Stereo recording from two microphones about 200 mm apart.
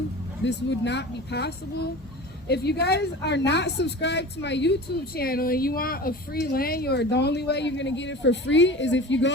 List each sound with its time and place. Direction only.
0.4 s a woman's voice: 60° left (ahead or behind)